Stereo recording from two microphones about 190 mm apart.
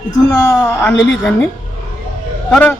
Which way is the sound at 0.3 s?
15° left (ahead or behind).